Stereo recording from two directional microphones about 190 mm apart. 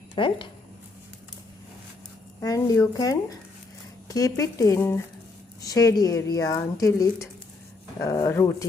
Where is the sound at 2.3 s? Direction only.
15° left (ahead or behind).